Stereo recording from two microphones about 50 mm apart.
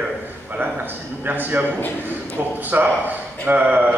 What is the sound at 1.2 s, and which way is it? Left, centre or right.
Speech, right.